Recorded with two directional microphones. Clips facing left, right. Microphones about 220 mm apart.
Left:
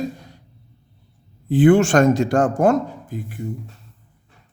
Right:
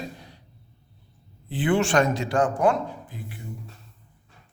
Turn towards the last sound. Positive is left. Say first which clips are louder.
# left 6 dB
turn(degrees=45)  # may be behind; listen again after turning